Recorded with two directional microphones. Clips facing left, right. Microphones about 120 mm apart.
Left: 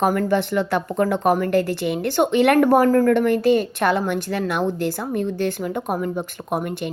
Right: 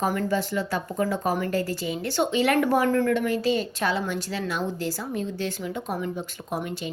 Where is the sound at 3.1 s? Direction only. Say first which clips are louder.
Left 7 dB; 55° left (ahead or behind).